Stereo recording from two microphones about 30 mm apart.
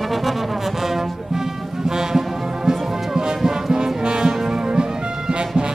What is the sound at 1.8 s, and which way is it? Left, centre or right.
Brass instrument, right.